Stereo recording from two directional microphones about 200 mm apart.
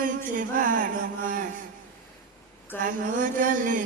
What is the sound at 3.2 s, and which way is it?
Mantra, 40° right (ahead or behind).